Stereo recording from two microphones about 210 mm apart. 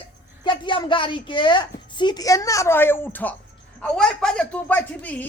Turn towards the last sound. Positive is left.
turn(degrees=5)  # may be behind; listen again after turning